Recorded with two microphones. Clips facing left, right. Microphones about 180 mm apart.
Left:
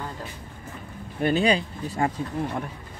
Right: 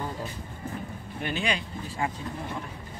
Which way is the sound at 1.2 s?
35° left (ahead or behind).